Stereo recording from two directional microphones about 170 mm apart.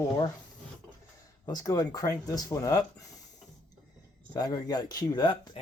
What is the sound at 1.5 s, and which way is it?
Speech, 20° left (ahead or behind).